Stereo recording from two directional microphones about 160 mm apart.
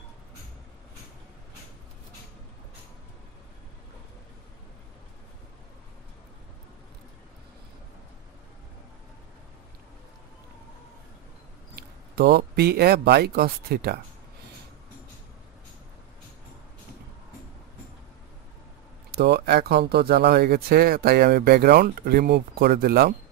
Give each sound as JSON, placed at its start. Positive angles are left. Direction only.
{"t": 11.7, "sound": "speech", "side_deg": -85}
{"t": 19.1, "sound": "speech", "side_deg": -90}